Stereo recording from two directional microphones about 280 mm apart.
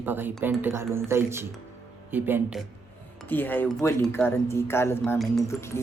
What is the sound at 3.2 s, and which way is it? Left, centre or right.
Speech, centre.